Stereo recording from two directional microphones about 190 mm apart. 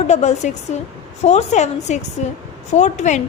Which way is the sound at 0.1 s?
35° left (ahead or behind).